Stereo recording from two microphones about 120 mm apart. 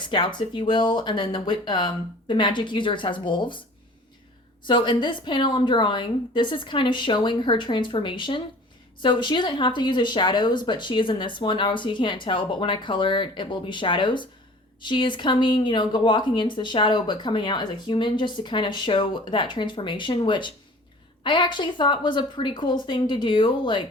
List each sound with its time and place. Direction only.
0.0 s speech: 40° left (ahead or behind)
4.6 s speech: 40° left (ahead or behind)